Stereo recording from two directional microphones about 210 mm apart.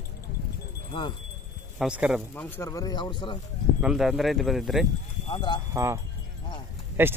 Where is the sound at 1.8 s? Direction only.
5° right (ahead or behind).